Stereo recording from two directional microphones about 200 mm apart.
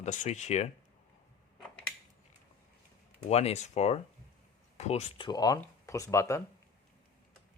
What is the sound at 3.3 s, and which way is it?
Speech, 30° left (ahead or behind).